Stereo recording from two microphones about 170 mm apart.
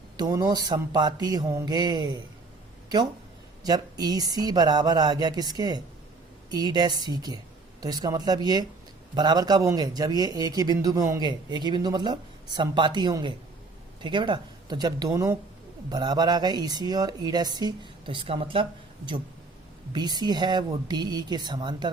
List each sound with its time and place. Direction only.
0.2 s speech: 25° right (ahead or behind)
3.6 s speech: 25° right (ahead or behind)